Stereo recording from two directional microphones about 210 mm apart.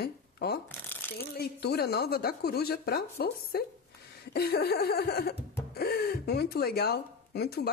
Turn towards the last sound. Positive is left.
turn(degrees=50)  # may be behind; listen again after turning